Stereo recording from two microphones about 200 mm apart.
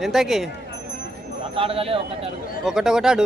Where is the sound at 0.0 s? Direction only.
Centre (ahead or behind).